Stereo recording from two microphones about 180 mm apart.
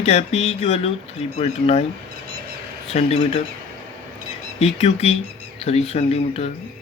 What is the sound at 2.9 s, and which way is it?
Speech, 35° left (ahead or behind).